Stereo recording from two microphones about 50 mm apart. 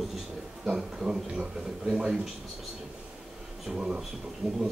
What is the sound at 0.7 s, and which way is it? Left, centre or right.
Speech, centre.